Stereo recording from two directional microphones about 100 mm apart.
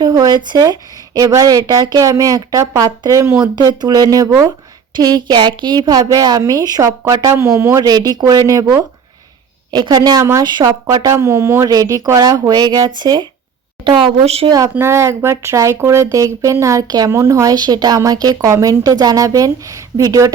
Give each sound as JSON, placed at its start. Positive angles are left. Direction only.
{"t": 0.0, "sound": "a sound", "side_deg": -45}
{"t": 0.4, "sound": "speech", "side_deg": -40}
{"t": 3.4, "sound": "speech", "side_deg": -45}
{"t": 7.8, "sound": "speech", "side_deg": -40}
{"t": 9.7, "sound": "speech", "side_deg": -45}
{"t": 10.7, "sound": "speech", "side_deg": -35}
{"t": 13.8, "sound": "a woman's voice", "side_deg": -60}
{"t": 14.5, "sound": "speech", "side_deg": -30}